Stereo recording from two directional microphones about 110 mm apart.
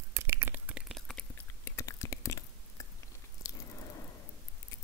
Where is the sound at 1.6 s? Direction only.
25° left (ahead or behind).